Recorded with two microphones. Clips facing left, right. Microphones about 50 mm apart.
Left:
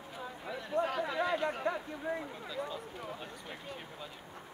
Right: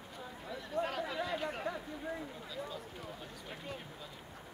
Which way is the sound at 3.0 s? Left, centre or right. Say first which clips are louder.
Left 4 dB; centre.